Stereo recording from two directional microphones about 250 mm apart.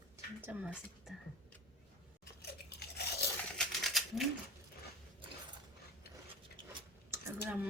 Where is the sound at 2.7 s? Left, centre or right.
Left.